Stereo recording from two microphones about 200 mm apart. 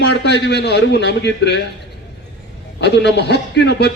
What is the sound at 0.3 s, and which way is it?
A man's voice, 55° left (ahead or behind).